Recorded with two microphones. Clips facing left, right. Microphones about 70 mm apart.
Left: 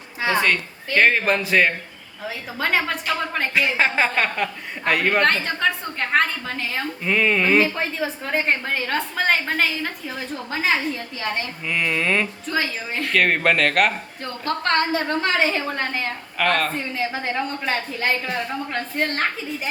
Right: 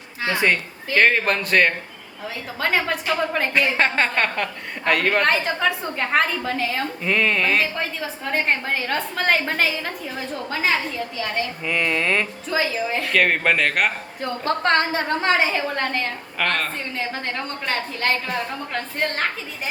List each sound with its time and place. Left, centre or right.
0.3 s a woman's voice: centre
5.3 s a woman's voice: centre
14.4 s a woman's voice: right
15.4 s a woman's voice: centre